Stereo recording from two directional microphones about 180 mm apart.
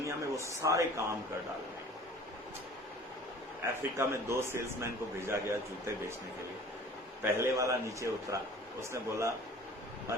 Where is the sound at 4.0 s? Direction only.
15° right (ahead or behind).